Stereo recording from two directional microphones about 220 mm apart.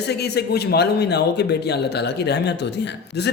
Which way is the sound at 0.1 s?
45° left (ahead or behind).